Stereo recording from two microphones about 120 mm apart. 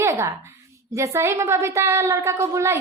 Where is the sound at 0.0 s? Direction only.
25° right (ahead or behind).